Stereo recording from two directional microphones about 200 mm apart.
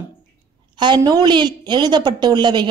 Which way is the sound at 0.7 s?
20° right (ahead or behind).